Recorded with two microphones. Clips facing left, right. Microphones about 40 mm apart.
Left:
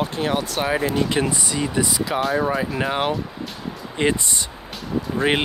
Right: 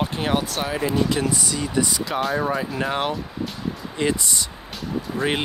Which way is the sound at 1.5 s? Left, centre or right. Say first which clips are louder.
Left 1 dB; centre.